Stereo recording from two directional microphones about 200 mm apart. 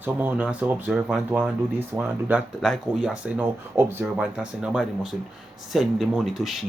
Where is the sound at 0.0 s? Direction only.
10° right (ahead or behind).